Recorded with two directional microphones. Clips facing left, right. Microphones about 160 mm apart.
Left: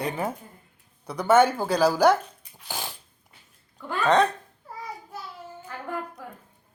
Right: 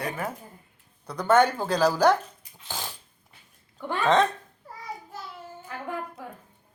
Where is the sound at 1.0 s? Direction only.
10° left (ahead or behind).